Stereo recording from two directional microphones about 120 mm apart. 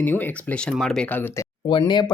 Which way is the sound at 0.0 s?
15° left (ahead or behind).